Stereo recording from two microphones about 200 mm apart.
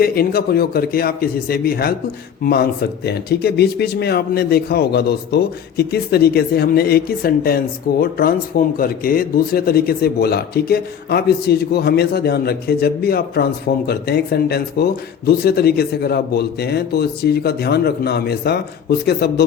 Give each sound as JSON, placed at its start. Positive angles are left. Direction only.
{"t": 0.0, "sound": "speech", "side_deg": 50}